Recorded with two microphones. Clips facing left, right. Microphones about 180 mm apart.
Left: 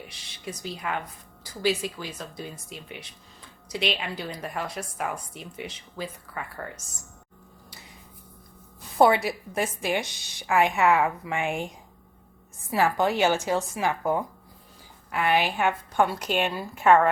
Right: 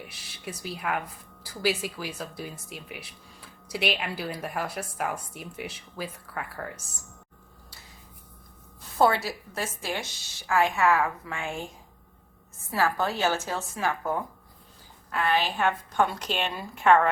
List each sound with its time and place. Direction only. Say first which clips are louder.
0.1 s speech: left 1 dB; 5° right (ahead or behind)
9.0 s a woman's voice: left 3 dB; 20° left (ahead or behind)
12.7 s a woman's voice: left 3 dB; 15° left (ahead or behind)